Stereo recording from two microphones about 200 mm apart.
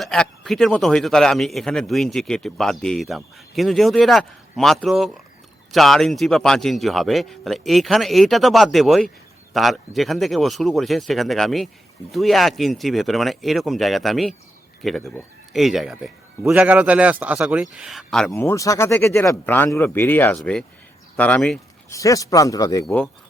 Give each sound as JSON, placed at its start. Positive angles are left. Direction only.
{"t": 0.0, "sound": "a man's voice", "side_deg": 0}
{"t": 18.3, "sound": "speech", "side_deg": 15}
{"t": 21.8, "sound": "speech", "side_deg": 15}